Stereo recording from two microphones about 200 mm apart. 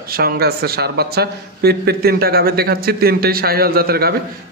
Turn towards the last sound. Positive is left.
turn(degrees=-50)  # may be behind; listen again after turning